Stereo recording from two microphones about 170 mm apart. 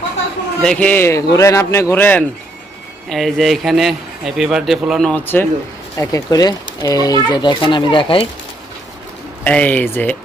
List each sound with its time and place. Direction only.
0.6 s a man's voice: 5° left (ahead or behind)
3.1 s a man's voice: centre (ahead or behind); by 8.3 s 30° left (ahead or behind)
9.4 s a man's voice: 10° left (ahead or behind)